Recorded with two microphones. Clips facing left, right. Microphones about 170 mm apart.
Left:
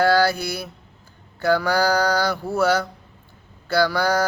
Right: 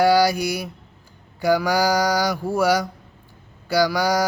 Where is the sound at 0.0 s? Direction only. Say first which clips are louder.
Right 1 dB; 15° right (ahead or behind).